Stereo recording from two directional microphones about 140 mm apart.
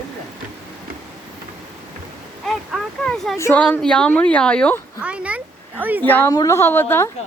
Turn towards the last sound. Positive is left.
turn(degrees=15)  # may be behind; listen again after turning